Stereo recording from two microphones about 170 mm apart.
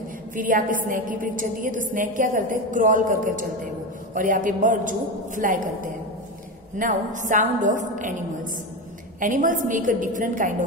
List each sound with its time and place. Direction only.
0.4 s a woman's voice: 50° right (ahead or behind)